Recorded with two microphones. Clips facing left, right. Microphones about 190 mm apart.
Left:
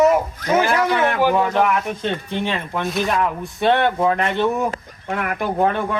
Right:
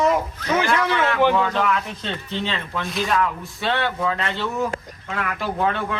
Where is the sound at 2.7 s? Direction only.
20° left (ahead or behind).